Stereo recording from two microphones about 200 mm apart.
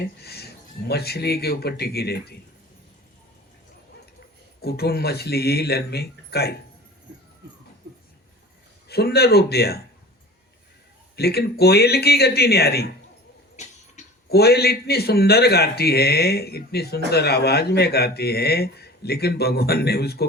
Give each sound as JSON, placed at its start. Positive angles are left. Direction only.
{"t": 0.2, "sound": "a sound", "side_deg": 50}
{"t": 0.9, "sound": "speech", "side_deg": 55}
{"t": 4.6, "sound": "speech", "side_deg": 50}
{"t": 8.9, "sound": "speech", "side_deg": 55}
{"t": 11.2, "sound": "speech", "side_deg": 50}
{"t": 13.6, "sound": "a sound", "side_deg": 35}
{"t": 14.3, "sound": "speech", "side_deg": 55}